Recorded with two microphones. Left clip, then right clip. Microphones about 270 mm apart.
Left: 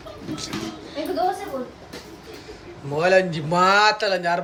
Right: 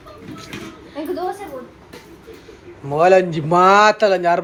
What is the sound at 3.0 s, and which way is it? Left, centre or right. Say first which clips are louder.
Speech: right 5 dB; centre.